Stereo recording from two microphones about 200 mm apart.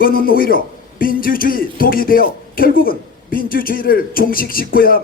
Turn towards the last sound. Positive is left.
turn(degrees=45)  # may be behind; listen again after turning